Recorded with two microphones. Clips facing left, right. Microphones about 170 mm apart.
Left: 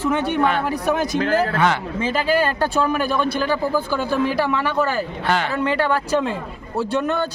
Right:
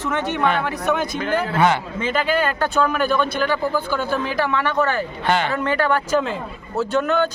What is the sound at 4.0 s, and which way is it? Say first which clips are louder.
Speech: left 2 dB; 35° left (ahead or behind).